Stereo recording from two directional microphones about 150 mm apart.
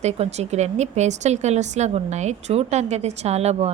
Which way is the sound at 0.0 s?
45° right (ahead or behind).